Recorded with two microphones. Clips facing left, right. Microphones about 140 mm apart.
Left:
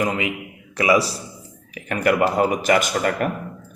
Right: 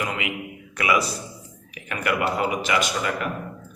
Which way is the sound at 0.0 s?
40° left (ahead or behind).